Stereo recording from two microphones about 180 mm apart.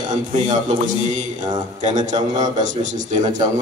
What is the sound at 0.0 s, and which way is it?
A man's voice, 40° right (ahead or behind).